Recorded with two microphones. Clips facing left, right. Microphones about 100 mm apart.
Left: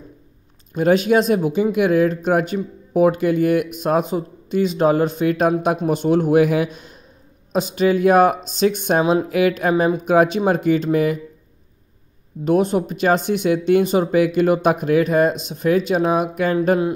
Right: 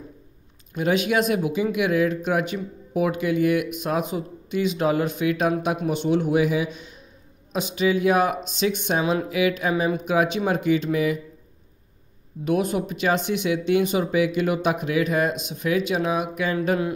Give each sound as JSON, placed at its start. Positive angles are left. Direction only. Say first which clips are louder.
{"t": 0.7, "sound": "speech", "louder": "left 6 dB", "side_deg": 40}
{"t": 12.4, "sound": "speech", "louder": "left 5 dB", "side_deg": 35}